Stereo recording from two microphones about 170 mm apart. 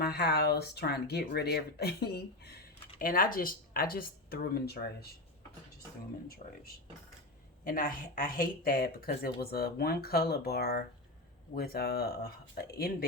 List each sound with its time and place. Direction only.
0.0 s speech: 70° left (ahead or behind)
6.4 s speech: 40° left (ahead or behind)
7.6 s speech: 55° left (ahead or behind)